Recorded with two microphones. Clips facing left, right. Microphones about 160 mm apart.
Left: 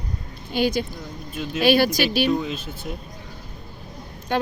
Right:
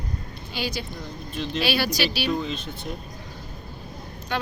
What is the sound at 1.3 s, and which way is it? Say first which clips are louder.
Speech: even; 5° left (ahead or behind).